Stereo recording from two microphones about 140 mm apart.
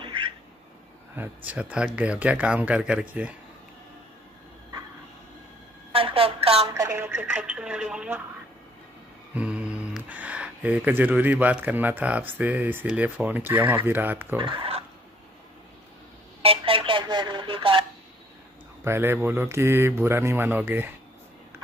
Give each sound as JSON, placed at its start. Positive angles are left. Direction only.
{"t": 0.0, "sound": "cat", "side_deg": -35}
{"t": 1.1, "sound": "speech", "side_deg": -15}
{"t": 5.9, "sound": "a sound", "side_deg": -40}
{"t": 6.7, "sound": "speech", "side_deg": -20}
{"t": 9.3, "sound": "speech", "side_deg": -10}
{"t": 14.4, "sound": "speech", "side_deg": -40}
{"t": 16.4, "sound": "a sound", "side_deg": -40}
{"t": 18.9, "sound": "speech", "side_deg": -15}